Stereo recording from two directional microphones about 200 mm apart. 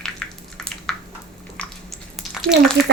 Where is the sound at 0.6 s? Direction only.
5° left (ahead or behind).